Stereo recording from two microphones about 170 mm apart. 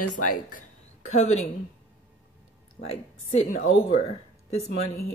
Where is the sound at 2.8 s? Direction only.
40° left (ahead or behind).